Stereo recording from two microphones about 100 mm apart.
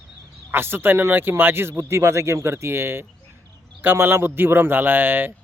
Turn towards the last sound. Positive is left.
turn(degrees=-20)  # may be behind; listen again after turning